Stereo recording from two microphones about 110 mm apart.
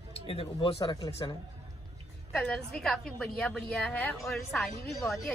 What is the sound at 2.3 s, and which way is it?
A woman's voice, 5° left (ahead or behind).